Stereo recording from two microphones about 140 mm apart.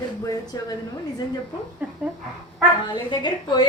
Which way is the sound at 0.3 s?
25° left (ahead or behind).